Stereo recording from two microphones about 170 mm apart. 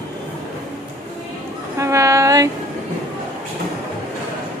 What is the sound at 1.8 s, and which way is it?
Speech, 15° right (ahead or behind).